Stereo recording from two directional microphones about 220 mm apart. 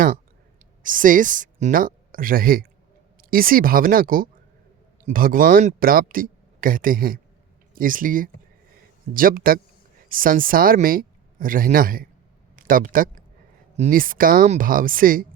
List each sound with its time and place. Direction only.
0.8 s speech: 35° right (ahead or behind)